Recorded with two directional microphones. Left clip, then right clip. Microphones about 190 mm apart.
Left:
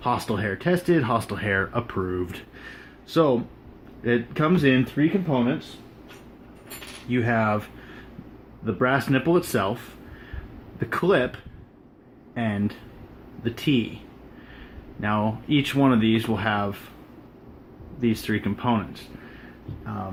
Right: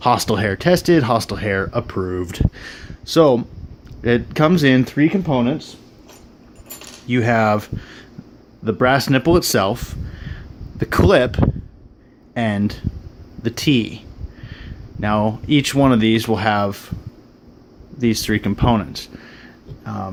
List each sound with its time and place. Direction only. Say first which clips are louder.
0.0 s speech: right 9 dB; 45° right (ahead or behind)
7.1 s speech: right 7 dB; 50° right (ahead or behind)
8.6 s speech: right 7 dB; 45° right (ahead or behind)
10.8 s speech: right 7 dB; 45° right (ahead or behind)
15.0 s speech: right 6 dB; 45° right (ahead or behind)
18.0 s speech: right 6 dB; 45° right (ahead or behind)